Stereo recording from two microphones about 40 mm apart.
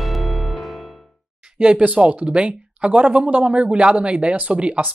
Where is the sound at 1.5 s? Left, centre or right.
Right.